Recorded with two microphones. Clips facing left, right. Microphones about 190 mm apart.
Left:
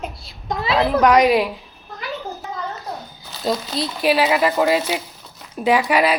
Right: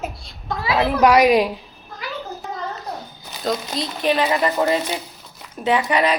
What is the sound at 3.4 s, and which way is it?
A woman's voice, 5° left (ahead or behind).